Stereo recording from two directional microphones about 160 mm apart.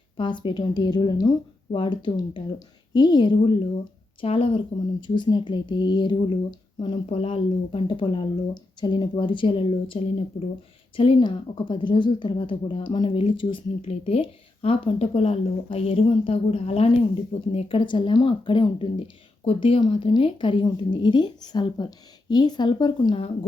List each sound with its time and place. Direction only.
0.2 s a woman's voice: 30° left (ahead or behind)